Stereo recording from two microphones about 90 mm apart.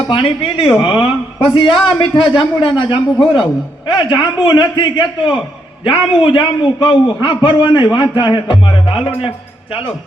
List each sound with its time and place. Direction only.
0.1 s a man's voice: 80° left